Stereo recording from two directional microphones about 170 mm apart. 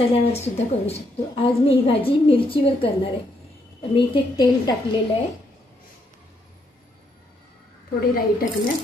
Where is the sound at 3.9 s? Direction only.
30° left (ahead or behind).